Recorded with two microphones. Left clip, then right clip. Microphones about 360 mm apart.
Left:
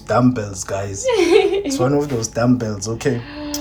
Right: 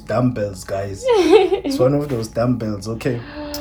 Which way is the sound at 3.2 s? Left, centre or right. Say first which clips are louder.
Left 1 dB; centre.